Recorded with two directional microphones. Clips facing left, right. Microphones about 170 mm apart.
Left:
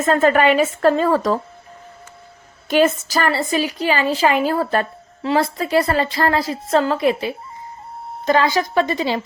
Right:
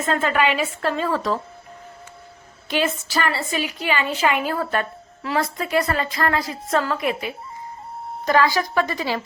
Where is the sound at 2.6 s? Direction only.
45° left (ahead or behind).